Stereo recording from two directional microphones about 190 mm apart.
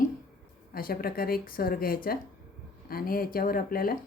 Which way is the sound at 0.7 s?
50° left (ahead or behind).